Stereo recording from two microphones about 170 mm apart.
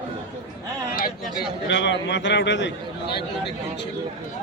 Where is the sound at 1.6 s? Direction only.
90° left.